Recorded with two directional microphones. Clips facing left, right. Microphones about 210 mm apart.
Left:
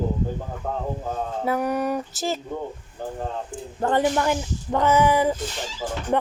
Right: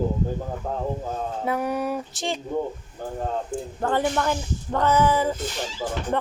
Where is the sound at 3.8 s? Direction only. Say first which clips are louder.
Left 3 dB; 15° left (ahead or behind).